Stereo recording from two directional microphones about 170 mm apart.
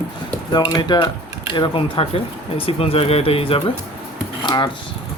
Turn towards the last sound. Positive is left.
turn(degrees=25)  # may be behind; listen again after turning